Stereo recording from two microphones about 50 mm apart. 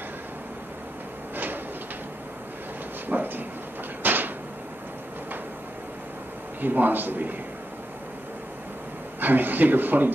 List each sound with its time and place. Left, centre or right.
1.3 s sliding door: right
3.1 s a sound: right
6.6 s speech: right
9.2 s speech: right